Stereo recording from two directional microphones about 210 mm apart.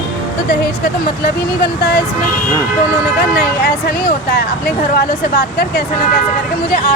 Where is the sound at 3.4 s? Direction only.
45° left (ahead or behind).